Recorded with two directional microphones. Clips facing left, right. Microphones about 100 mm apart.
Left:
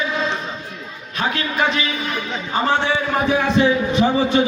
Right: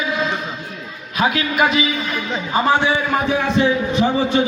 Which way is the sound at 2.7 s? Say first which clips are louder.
Right 3 dB; 15° right (ahead or behind).